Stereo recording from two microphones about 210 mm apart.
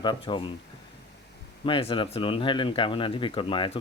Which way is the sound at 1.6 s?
25° left (ahead or behind).